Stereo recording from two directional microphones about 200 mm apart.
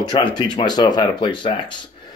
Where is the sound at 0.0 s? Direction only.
25° left (ahead or behind).